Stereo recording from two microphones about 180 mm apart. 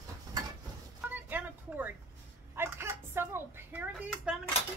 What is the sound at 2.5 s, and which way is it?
A child's voice, 10° right (ahead or behind).